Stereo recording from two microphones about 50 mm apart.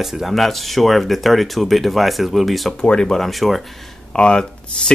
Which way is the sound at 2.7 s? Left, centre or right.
Centre.